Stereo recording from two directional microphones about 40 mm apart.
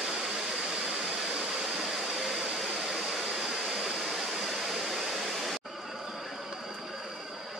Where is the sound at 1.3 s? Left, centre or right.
Centre.